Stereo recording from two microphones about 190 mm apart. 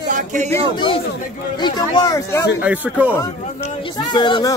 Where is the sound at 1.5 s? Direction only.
25° left (ahead or behind).